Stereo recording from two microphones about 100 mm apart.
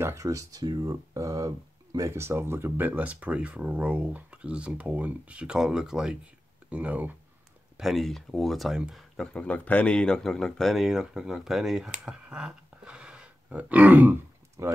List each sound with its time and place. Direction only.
0.0 s speech: 30° right (ahead or behind); by 7.2 s 15° right (ahead or behind)
7.7 s speech: centre (ahead or behind); by 14.1 s 15° right (ahead or behind)
14.6 s speech: 30° right (ahead or behind)